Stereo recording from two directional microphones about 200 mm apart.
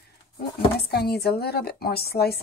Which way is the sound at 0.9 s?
55° left (ahead or behind).